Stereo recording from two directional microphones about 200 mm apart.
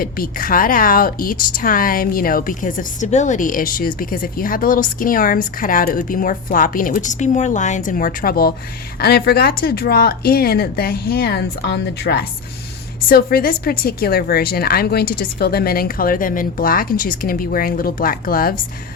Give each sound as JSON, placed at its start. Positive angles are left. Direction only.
{"t": 0.0, "sound": "speech", "side_deg": 45}